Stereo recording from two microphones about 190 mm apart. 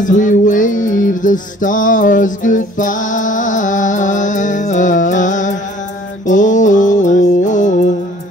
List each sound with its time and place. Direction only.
0.0 s music: 40° left (ahead or behind)
6.2 s mantra: 40° left (ahead or behind)